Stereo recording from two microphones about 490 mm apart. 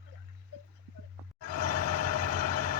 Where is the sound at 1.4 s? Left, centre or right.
Right.